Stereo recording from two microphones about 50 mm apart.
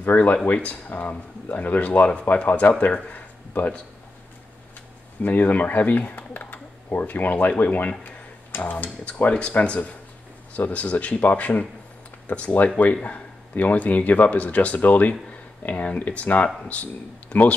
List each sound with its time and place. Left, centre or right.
0.0 s speech: left
0.5 s speech: left
0.8 s speech: left
5.2 s speech: left